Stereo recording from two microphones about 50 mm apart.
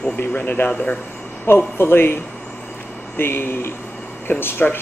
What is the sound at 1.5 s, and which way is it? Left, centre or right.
Speech, left.